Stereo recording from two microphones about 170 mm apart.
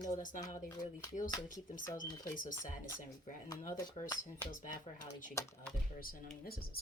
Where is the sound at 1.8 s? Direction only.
20° left (ahead or behind).